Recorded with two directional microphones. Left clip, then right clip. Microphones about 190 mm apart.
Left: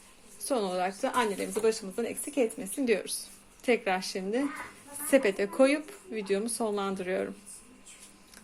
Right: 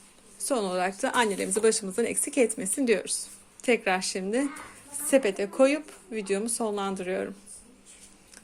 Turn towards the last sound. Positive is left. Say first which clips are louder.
# right 1 dB
turn(degrees=-10)  # may be behind; listen again after turning